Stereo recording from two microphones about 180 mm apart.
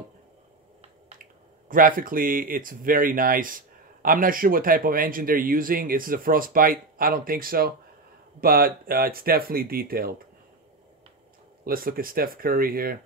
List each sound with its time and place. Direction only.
1.7 s speech: 50° right (ahead or behind)
11.6 s speech: 55° right (ahead or behind)